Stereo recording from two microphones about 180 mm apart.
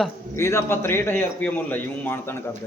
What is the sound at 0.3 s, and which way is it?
A man's voice, 15° left (ahead or behind).